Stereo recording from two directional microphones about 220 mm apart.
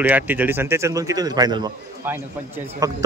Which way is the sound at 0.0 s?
10° right (ahead or behind).